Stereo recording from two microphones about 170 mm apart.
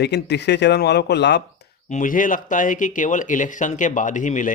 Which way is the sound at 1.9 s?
50° left (ahead or behind).